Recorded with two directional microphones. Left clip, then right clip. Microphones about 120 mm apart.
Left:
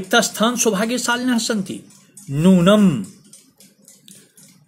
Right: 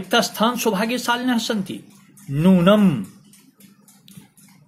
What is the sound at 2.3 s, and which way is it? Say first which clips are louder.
Speech: left 1 dB; 75° left (ahead or behind).